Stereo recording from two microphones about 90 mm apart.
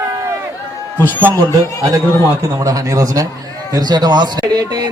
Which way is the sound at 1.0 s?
20° left (ahead or behind).